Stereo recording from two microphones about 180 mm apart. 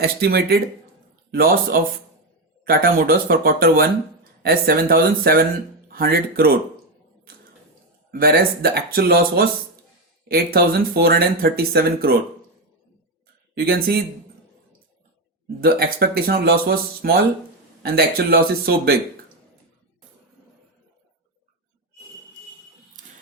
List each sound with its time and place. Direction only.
0.0 s speech: 60° right (ahead or behind)
8.1 s speech: 55° right (ahead or behind)
13.6 s speech: 60° right (ahead or behind)
15.6 s speech: 55° right (ahead or behind)